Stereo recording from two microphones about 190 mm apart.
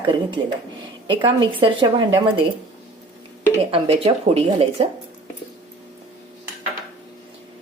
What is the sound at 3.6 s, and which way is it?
A woman's voice, 30° right (ahead or behind).